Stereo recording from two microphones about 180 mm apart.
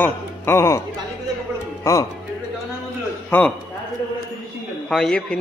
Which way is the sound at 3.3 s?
10° left (ahead or behind).